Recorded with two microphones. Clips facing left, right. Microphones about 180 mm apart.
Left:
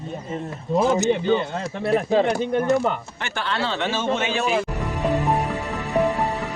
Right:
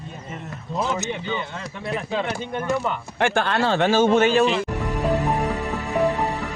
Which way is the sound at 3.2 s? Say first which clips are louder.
Right 9 dB; 50° right (ahead or behind).